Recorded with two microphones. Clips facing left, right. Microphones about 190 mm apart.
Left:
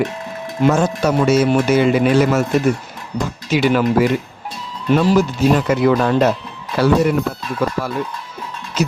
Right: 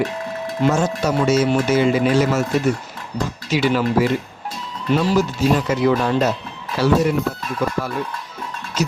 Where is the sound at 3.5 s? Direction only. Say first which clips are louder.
Left 3 dB; 60° left (ahead or behind).